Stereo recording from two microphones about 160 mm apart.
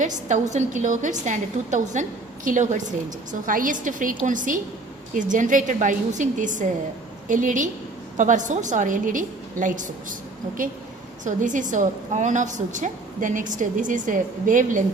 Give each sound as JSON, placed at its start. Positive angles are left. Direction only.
{"t": 0.0, "sound": "a woman's voice", "side_deg": -50}
{"t": 11.2, "sound": "a woman's voice", "side_deg": -50}